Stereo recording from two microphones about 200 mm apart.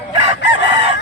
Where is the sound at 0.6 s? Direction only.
30° right (ahead or behind).